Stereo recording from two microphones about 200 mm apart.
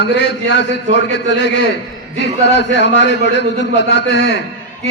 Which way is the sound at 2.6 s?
60° left (ahead or behind).